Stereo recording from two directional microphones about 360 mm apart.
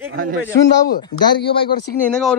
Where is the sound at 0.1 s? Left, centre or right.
Right.